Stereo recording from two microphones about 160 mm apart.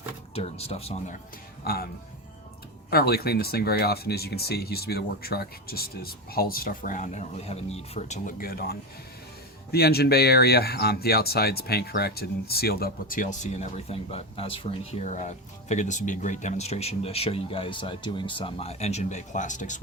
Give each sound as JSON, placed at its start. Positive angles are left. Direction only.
{"t": 0.3, "sound": "speech", "side_deg": 40}
{"t": 1.6, "sound": "speech", "side_deg": 75}
{"t": 2.9, "sound": "speech", "side_deg": 80}